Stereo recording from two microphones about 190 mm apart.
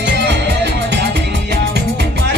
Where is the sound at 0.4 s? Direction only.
65° right (ahead or behind).